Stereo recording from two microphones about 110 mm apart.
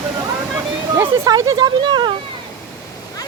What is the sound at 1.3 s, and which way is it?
Speech, 35° right (ahead or behind).